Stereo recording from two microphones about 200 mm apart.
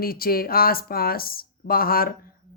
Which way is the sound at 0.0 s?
50° left (ahead or behind).